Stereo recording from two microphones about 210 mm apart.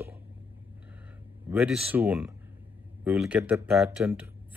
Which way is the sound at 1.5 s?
5° right (ahead or behind).